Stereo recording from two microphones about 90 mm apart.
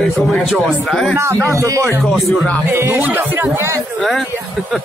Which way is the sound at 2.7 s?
25° right (ahead or behind).